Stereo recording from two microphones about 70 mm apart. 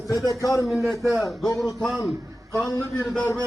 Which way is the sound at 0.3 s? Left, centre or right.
Left.